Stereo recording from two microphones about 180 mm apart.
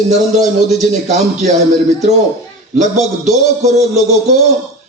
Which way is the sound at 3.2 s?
40° right (ahead or behind).